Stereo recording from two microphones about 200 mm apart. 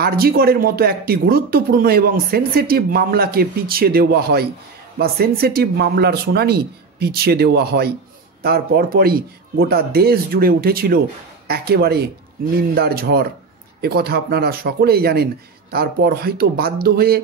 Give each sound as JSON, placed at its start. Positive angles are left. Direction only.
{"t": 0.0, "sound": "speech", "side_deg": -50}